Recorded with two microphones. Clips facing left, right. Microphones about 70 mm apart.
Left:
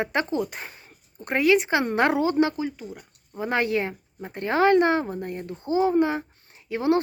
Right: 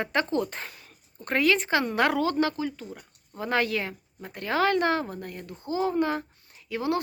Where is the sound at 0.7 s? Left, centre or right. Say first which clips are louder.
Left 1 dB; left.